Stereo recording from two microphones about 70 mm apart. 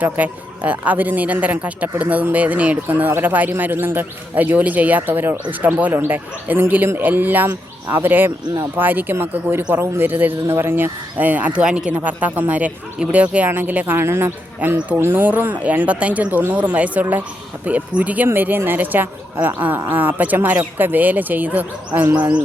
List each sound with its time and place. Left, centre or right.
0.0 s a man's voice: right
11.2 s speech: right
11.9 s a man's voice: right